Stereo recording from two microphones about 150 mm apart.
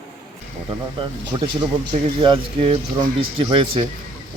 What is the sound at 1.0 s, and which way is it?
Speech, 35° right (ahead or behind).